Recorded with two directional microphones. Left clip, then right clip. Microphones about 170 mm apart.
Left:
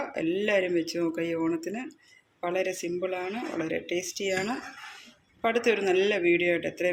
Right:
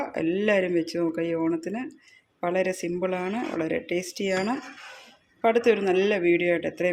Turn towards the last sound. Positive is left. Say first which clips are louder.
# right 2 dB
turn(degrees=-35)  # may be behind; listen again after turning